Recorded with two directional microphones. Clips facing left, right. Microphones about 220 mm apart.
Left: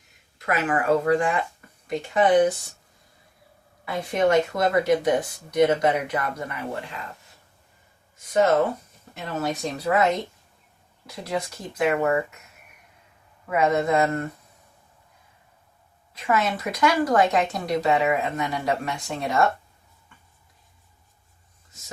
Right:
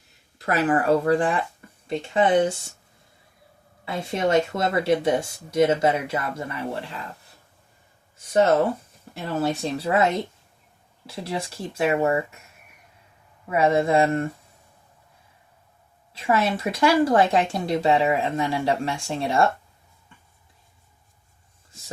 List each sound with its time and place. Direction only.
0.3 s speech: 35° right (ahead or behind)
3.8 s speech: 25° right (ahead or behind)
9.2 s speech: 30° right (ahead or behind)
13.5 s speech: 30° right (ahead or behind)
16.1 s speech: 30° right (ahead or behind)